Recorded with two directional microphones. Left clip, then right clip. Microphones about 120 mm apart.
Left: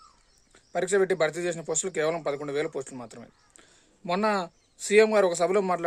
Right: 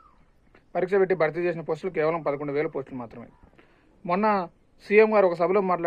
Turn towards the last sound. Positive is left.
turn(degrees=35)  # may be behind; listen again after turning